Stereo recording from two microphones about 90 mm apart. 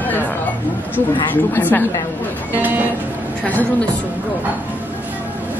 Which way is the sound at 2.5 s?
20° right (ahead or behind).